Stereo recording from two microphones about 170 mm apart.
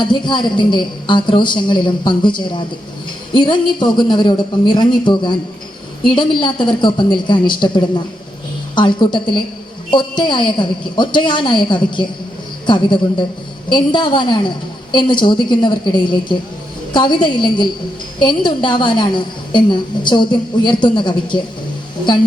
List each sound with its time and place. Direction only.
0.0 s a woman's voice: 25° left (ahead or behind)